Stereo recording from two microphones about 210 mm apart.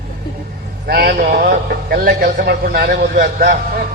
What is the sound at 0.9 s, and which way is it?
A man's voice, 50° right (ahead or behind).